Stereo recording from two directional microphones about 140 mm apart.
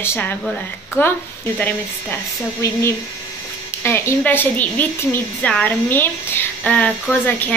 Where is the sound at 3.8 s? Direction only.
15° left (ahead or behind).